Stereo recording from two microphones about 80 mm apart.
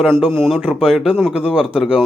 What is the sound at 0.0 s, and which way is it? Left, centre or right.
A man's voice, centre.